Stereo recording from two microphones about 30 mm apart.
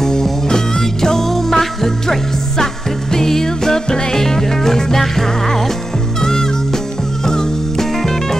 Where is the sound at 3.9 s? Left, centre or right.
Left.